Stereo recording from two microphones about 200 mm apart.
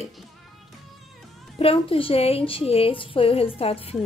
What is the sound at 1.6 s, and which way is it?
A woman's voice, 25° left (ahead or behind).